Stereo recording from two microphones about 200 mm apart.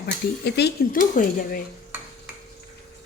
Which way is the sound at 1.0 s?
45° left (ahead or behind).